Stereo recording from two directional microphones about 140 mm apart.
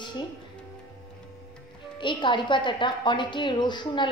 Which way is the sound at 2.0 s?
35° left (ahead or behind).